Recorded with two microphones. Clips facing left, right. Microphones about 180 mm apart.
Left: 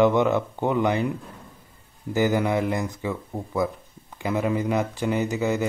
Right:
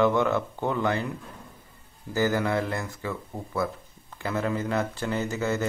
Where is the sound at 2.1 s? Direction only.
15° left (ahead or behind).